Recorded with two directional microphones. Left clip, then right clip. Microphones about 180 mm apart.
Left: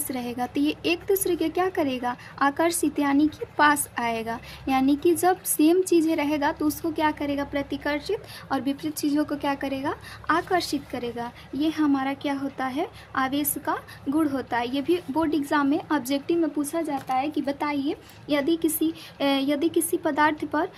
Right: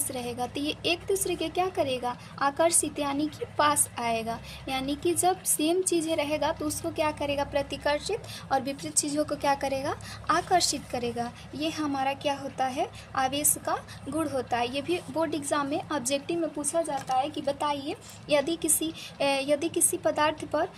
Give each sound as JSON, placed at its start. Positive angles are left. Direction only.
{"t": 0.1, "sound": "a woman's voice", "side_deg": 40}